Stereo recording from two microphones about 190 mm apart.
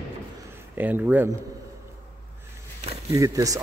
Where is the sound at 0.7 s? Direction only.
10° right (ahead or behind).